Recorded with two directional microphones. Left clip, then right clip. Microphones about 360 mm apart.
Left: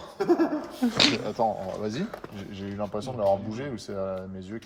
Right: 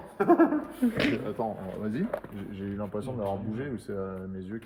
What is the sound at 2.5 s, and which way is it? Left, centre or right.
Speech, centre.